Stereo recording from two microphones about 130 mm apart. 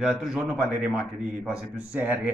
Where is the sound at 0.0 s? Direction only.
5° right (ahead or behind).